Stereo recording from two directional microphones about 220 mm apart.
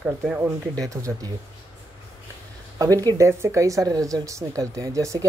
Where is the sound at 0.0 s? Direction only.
5° right (ahead or behind).